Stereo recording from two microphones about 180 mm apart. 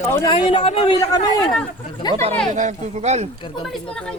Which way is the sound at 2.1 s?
35° right (ahead or behind).